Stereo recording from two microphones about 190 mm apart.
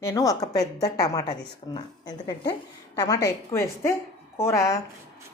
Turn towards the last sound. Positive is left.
turn(degrees=15)  # may be behind; listen again after turning